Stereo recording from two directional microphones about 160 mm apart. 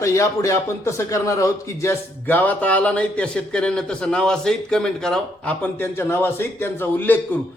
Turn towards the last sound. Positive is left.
turn(degrees=10)  # may be behind; listen again after turning